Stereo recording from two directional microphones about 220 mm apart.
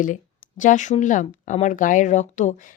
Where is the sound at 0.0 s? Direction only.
35° left (ahead or behind).